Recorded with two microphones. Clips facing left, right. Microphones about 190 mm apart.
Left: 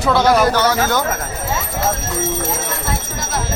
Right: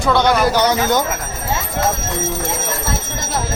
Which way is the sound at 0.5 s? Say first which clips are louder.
Right 1 dB; 15° right (ahead or behind).